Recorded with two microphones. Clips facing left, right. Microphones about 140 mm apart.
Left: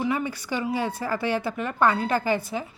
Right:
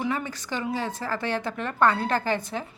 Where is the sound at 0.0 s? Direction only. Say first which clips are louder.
Left 2 dB; 5° left (ahead or behind).